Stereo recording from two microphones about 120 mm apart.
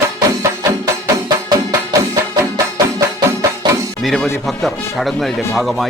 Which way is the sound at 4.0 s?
Centre (ahead or behind).